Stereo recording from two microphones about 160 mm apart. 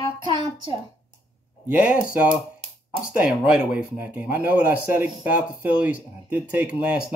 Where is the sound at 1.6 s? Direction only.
10° right (ahead or behind).